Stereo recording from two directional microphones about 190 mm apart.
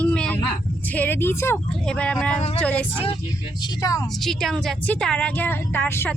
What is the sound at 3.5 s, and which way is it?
Speech, 25° left (ahead or behind).